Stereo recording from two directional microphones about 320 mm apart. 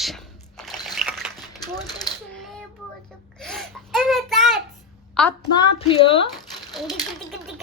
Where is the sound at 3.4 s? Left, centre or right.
Centre.